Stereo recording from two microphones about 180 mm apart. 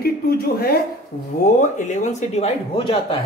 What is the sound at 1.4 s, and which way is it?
A man's voice, 45° left (ahead or behind).